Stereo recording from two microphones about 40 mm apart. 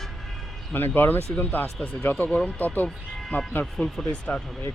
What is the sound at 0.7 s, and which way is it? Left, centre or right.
Speech, left.